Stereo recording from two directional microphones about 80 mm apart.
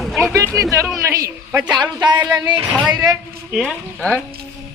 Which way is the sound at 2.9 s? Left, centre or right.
Right.